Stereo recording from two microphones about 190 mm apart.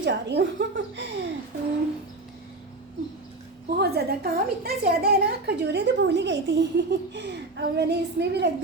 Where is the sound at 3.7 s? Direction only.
55° right (ahead or behind).